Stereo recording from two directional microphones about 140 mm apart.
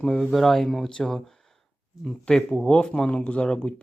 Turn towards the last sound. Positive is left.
turn(degrees=5)  # may be behind; listen again after turning